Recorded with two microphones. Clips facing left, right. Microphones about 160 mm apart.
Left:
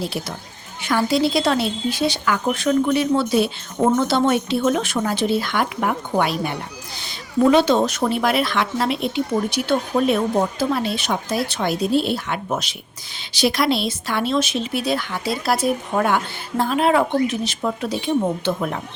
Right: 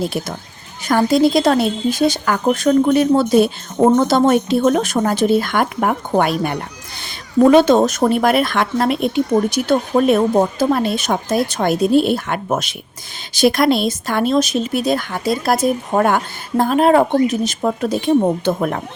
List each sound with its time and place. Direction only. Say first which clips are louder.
0.0 s a woman's voice: right 5 dB; 50° right (ahead or behind)